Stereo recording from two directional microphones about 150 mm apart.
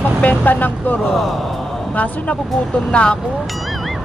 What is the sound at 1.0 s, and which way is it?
Speech, centre (ahead or behind).